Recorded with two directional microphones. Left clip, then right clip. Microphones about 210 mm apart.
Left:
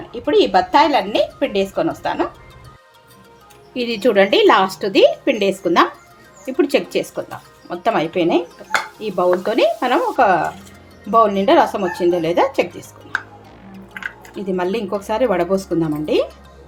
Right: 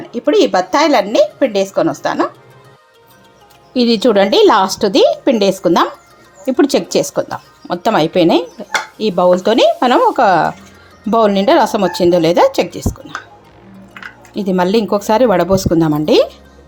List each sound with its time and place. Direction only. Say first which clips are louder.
0.1 s speech: right 3 dB; 30° right (ahead or behind)
3.8 s a woman's voice: right 4 dB; 30° right (ahead or behind)
14.3 s a woman's voice: right 8 dB; 40° right (ahead or behind)